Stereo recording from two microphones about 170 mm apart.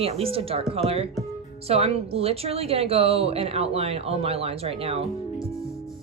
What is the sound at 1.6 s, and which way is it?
A woman's voice, 35° right (ahead or behind).